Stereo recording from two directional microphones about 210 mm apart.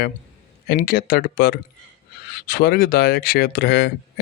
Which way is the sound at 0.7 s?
45° left (ahead or behind).